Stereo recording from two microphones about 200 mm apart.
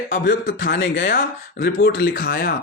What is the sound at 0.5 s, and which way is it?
Speech, 65° left (ahead or behind).